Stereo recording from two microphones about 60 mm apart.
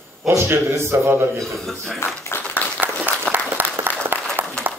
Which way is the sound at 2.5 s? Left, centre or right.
Right.